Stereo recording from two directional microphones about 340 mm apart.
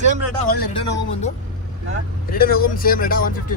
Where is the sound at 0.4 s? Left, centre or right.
Centre.